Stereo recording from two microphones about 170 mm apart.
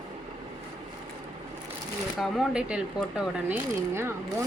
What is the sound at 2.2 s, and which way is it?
A woman's voice, 5° right (ahead or behind).